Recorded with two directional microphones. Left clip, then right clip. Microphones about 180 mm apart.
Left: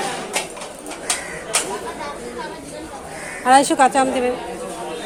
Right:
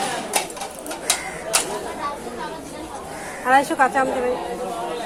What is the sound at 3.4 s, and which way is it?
Speech, 55° left (ahead or behind).